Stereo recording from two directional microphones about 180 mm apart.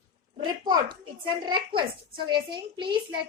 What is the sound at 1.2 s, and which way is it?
A woman's voice, 25° right (ahead or behind).